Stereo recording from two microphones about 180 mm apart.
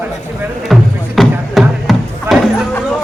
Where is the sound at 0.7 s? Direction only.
Centre (ahead or behind).